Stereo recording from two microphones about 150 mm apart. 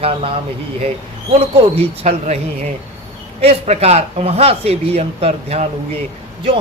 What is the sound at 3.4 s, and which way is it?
A man's voice, 45° right (ahead or behind).